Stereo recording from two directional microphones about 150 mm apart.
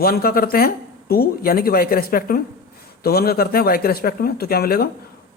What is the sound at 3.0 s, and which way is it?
Speech, 90° left.